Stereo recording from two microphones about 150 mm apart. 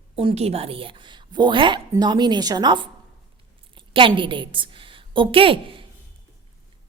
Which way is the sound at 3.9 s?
35° right (ahead or behind).